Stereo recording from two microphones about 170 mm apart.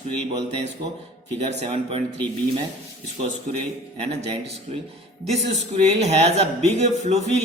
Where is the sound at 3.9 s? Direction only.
40° right (ahead or behind).